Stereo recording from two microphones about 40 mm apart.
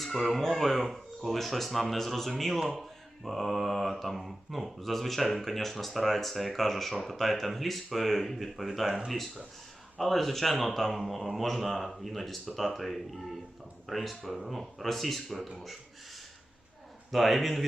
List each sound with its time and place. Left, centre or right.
0.0 s speech: centre
8.9 s speech: centre
10.0 s speech: centre
17.1 s speech: centre